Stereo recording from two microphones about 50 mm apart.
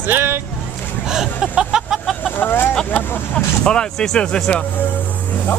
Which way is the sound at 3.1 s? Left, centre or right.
Left.